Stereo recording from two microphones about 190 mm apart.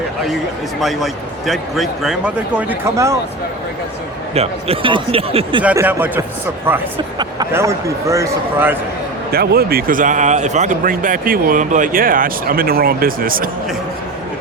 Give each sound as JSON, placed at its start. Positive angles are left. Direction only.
{"t": 0.8, "sound": "speech", "side_deg": 0}
{"t": 4.4, "sound": "speech", "side_deg": -30}
{"t": 5.6, "sound": "a man's voice", "side_deg": -10}
{"t": 9.3, "sound": "speech", "side_deg": -55}